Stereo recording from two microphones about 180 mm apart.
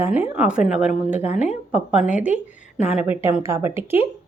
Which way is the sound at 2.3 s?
40° left (ahead or behind).